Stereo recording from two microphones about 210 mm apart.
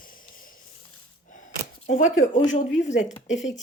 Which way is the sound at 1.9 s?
35° left (ahead or behind).